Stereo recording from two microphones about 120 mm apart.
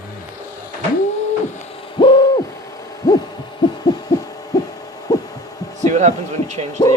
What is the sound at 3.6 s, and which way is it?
Hoot, 40° left (ahead or behind).